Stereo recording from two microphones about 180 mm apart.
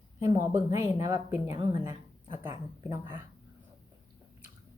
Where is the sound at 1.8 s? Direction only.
15° right (ahead or behind).